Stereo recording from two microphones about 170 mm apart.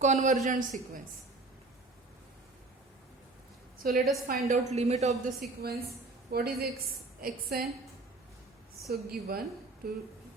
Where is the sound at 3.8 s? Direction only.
60° right (ahead or behind).